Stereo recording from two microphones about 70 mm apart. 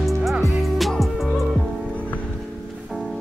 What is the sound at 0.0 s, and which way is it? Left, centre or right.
Music, centre.